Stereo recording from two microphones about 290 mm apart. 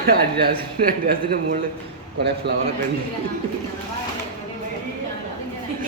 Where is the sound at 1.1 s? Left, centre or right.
Right.